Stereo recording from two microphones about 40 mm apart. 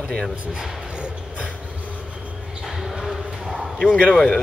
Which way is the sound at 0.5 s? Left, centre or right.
Right.